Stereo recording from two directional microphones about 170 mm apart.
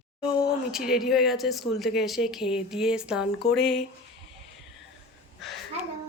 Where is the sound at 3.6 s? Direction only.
75° left (ahead or behind).